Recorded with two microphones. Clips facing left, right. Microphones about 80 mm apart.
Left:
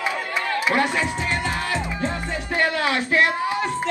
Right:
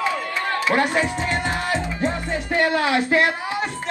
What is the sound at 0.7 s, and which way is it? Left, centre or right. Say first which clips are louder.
Music: right 3 dB; right.